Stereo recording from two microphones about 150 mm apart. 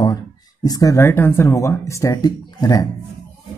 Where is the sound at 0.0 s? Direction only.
25° left (ahead or behind).